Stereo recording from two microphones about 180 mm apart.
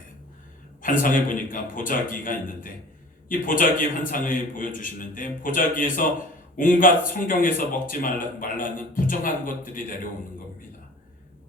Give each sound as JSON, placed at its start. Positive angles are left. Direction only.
{"t": 0.8, "sound": "speech", "side_deg": 50}